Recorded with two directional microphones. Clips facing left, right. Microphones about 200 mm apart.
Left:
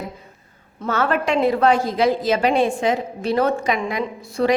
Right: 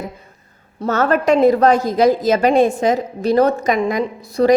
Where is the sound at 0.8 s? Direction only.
40° right (ahead or behind).